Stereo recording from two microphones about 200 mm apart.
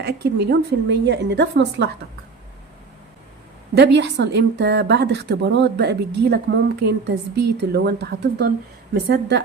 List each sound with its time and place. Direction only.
0.0 s a woman's voice: 55° right (ahead or behind)
3.8 s a woman's voice: 60° right (ahead or behind)